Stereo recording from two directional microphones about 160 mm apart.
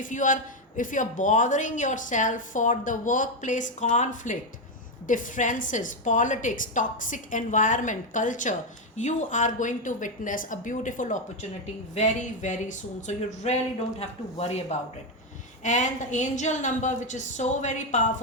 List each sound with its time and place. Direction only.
0.0 s a man's voice: 55° left (ahead or behind)